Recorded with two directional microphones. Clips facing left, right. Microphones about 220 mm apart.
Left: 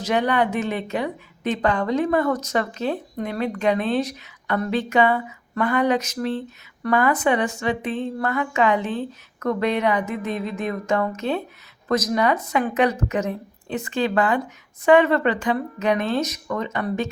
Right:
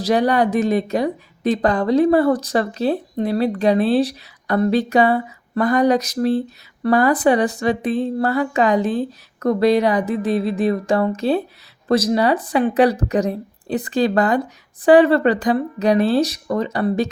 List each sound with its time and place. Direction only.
0.0 s a woman's voice: 35° right (ahead or behind)